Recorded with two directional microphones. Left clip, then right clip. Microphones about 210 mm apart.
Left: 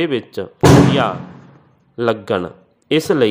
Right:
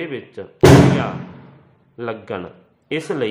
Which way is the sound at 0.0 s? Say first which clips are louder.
Left 9 dB; 40° left (ahead or behind).